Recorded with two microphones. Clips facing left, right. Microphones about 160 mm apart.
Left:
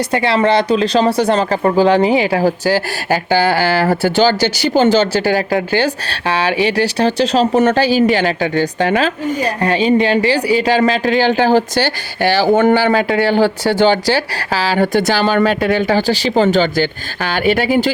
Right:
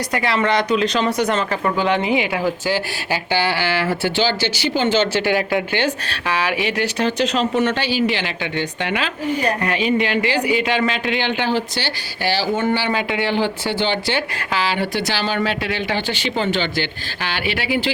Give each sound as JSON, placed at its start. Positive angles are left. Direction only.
{"t": 0.1, "sound": "speech", "side_deg": 30}